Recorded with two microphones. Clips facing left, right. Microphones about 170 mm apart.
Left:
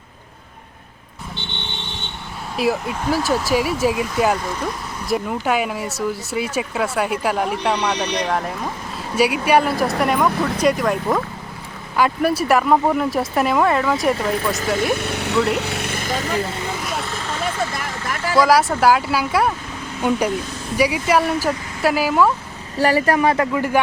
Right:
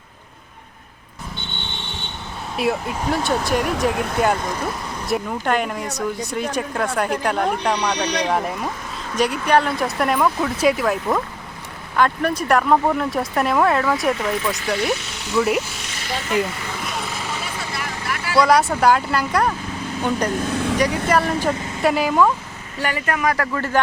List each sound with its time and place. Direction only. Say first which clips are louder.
2.6 s speech: left 1 dB; centre (ahead or behind)
3.9 s speech: even; 55° right (ahead or behind)
5.0 s speech: left 1 dB; 5° left (ahead or behind)
14.3 s speech: left 2 dB; 45° left (ahead or behind); by 15.4 s 60° left (ahead or behind)
15.4 s speech: right 1 dB; centre (ahead or behind)
15.6 s vehicle: left 8 dB; 60° left (ahead or behind); by 16.3 s 45° left (ahead or behind)
18.3 s speech: left 1 dB; centre (ahead or behind)
20.5 s vehicle: right 8 dB; 65° right (ahead or behind)
20.7 s speech: left 4 dB; 10° left (ahead or behind)
22.8 s speech: left 6 dB; 35° left (ahead or behind)
23.6 s speech: left 2 dB; 10° left (ahead or behind)